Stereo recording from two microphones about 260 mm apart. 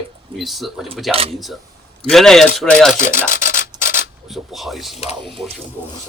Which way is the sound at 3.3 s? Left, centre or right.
Left.